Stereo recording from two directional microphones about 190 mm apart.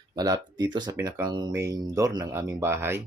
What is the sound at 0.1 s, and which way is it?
Speech, 20° right (ahead or behind).